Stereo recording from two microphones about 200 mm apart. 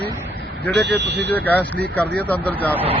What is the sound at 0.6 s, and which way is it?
Speech, 55° right (ahead or behind).